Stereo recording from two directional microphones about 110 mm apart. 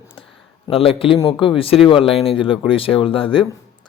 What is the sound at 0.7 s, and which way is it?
Speech, 55° left (ahead or behind).